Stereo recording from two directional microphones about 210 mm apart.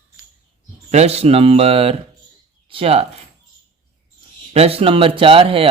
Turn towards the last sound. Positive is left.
turn(degrees=-25)  # may be behind; listen again after turning